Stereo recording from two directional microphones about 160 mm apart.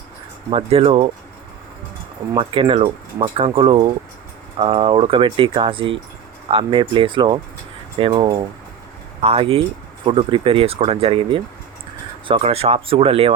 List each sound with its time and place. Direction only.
0.5 s speech: 35° right (ahead or behind)
2.3 s speech: 35° right (ahead or behind)